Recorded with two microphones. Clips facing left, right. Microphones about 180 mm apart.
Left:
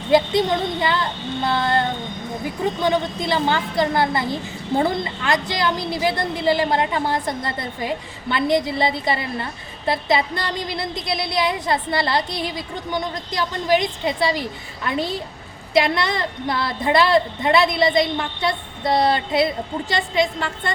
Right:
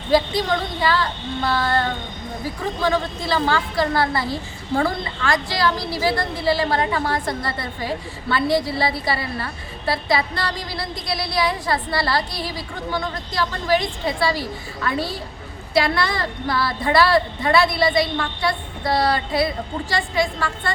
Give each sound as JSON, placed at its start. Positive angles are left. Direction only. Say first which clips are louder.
{"t": 0.1, "sound": "a woman's voice", "louder": "left 2 dB", "side_deg": 20}